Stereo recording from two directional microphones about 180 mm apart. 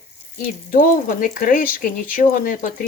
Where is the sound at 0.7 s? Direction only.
50° left (ahead or behind).